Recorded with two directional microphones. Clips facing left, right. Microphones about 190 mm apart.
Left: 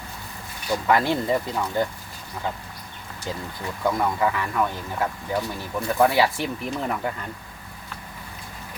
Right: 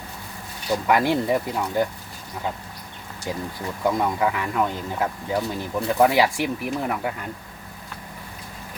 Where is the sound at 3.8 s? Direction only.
15° right (ahead or behind).